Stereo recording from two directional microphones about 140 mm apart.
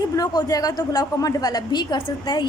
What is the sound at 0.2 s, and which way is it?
A woman's voice, 25° left (ahead or behind).